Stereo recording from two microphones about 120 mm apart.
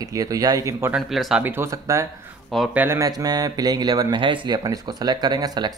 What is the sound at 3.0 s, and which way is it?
Speech, 30° right (ahead or behind).